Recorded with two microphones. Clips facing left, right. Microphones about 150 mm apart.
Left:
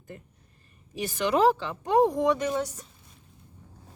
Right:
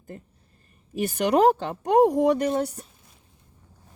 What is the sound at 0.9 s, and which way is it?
Speech, 50° right (ahead or behind).